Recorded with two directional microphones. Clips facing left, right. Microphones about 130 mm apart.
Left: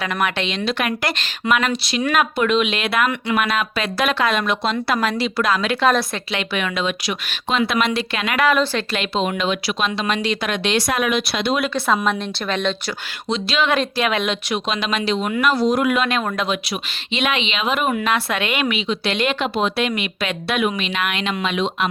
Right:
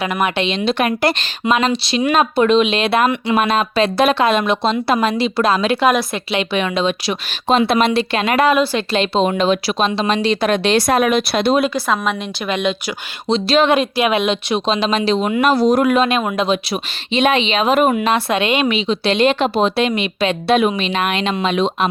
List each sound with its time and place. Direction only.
0.0 s speech: 20° right (ahead or behind)
8.4 s a woman's voice: 15° right (ahead or behind)
8.9 s speech: 30° right (ahead or behind)
11.7 s a woman's voice: centre (ahead or behind)
13.2 s speech: 35° right (ahead or behind)
13.7 s speech: 20° right (ahead or behind); by 16.0 s 40° right (ahead or behind)
16.0 s speech: 20° right (ahead or behind); by 17.9 s 40° right (ahead or behind)
17.9 s speech: 25° right (ahead or behind)